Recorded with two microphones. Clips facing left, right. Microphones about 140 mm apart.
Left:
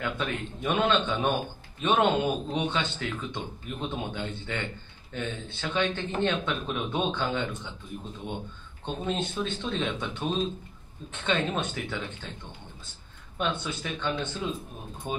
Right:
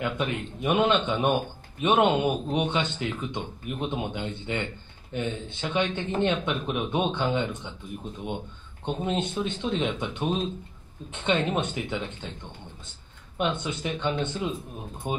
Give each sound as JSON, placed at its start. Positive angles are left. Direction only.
{"t": 0.0, "sound": "speech", "side_deg": -15}
{"t": 8.8, "sound": "speech", "side_deg": -20}
{"t": 13.4, "sound": "speech", "side_deg": -20}